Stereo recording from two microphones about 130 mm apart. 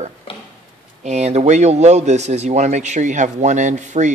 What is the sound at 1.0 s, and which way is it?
A man's voice, 60° right (ahead or behind).